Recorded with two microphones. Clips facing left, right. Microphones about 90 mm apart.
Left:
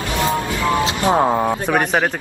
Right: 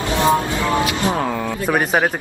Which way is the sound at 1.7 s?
5° right (ahead or behind).